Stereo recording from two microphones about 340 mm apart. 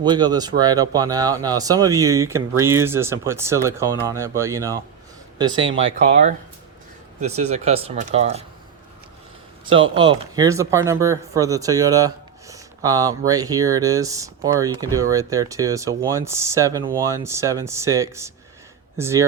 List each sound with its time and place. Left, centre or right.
0.0 s speech: centre
5.5 s speech: right
5.8 s speech: centre
9.6 s speech: centre